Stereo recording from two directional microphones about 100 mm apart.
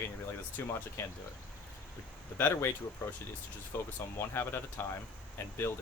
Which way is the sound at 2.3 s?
25° left (ahead or behind).